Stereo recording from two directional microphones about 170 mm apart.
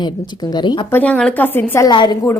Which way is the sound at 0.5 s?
25° left (ahead or behind).